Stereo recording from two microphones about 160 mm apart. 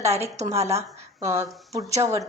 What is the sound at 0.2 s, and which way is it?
Speech, 20° right (ahead or behind).